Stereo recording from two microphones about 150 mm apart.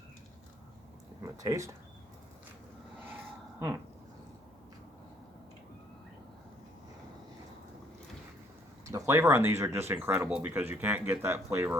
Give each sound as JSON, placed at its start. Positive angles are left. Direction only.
{"t": 1.2, "sound": "speech", "side_deg": -20}
{"t": 8.8, "sound": "speech", "side_deg": -20}